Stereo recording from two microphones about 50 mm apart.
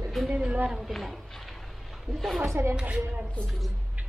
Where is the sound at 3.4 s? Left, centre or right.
Centre.